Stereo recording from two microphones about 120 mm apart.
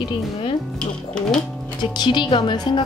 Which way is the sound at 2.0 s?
40° left (ahead or behind).